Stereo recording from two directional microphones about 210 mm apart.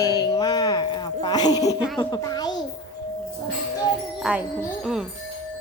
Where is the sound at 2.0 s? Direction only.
20° left (ahead or behind).